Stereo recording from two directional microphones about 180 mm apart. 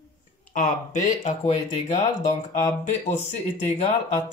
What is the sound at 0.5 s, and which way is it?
Speech, 45° left (ahead or behind).